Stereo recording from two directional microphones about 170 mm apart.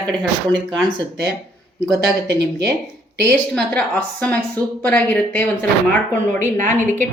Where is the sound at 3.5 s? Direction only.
5° left (ahead or behind).